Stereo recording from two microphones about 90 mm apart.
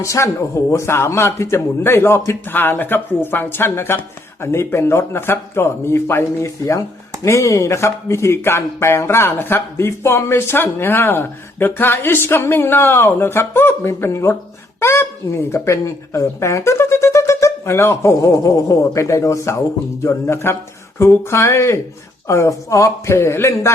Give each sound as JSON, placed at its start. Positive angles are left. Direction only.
{"t": 0.0, "sound": "a man's voice", "side_deg": 35}